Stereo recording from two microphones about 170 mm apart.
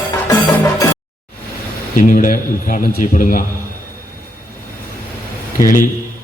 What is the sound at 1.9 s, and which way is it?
A man's voice, 50° left (ahead or behind).